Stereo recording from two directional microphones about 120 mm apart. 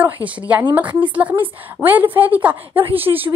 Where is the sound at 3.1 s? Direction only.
30° right (ahead or behind).